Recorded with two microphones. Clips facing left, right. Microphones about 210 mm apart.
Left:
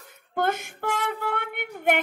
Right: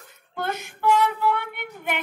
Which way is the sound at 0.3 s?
50° left (ahead or behind).